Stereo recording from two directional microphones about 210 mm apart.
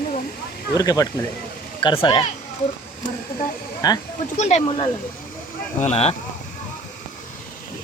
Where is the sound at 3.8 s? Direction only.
20° left (ahead or behind).